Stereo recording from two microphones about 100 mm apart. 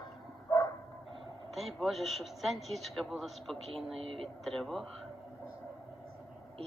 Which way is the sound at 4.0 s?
65° right (ahead or behind).